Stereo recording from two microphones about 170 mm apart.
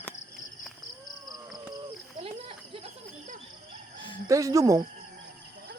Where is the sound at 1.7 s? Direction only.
30° right (ahead or behind).